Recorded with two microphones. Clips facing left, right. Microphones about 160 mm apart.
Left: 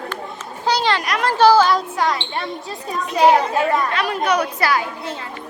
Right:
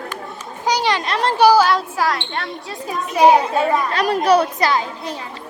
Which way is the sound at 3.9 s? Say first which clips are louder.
Right 4 dB; 35° right (ahead or behind).